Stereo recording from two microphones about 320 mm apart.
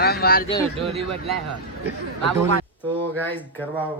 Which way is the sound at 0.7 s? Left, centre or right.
Centre.